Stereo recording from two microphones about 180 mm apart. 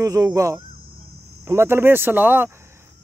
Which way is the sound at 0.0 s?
20° right (ahead or behind).